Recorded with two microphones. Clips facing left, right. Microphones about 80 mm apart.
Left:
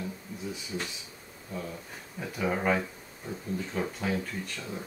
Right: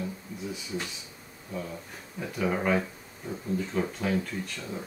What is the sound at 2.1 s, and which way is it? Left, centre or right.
Speech, centre.